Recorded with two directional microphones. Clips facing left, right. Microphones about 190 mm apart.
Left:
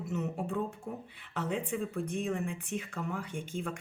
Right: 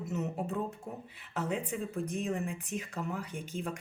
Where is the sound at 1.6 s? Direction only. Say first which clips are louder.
Left 1 dB; 40° right (ahead or behind).